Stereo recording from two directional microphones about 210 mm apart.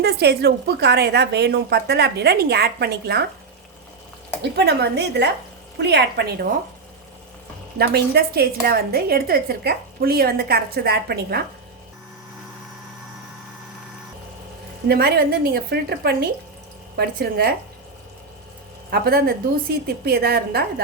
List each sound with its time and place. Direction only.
0.0 s a woman's voice: 50° right (ahead or behind)
4.5 s a woman's voice: 50° right (ahead or behind)
7.8 s a woman's voice: 50° right (ahead or behind)
14.8 s a woman's voice: 45° right (ahead or behind)
18.9 s a woman's voice: 50° right (ahead or behind)